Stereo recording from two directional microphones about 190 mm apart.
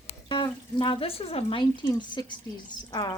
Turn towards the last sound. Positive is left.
turn(degrees=25)  # may be behind; listen again after turning